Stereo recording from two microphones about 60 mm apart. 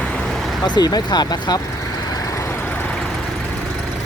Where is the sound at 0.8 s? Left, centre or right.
Left.